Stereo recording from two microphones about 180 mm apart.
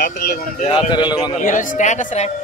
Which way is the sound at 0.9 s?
25° left (ahead or behind).